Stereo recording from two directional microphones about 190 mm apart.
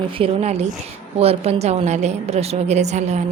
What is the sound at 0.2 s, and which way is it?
A woman's voice, 35° right (ahead or behind).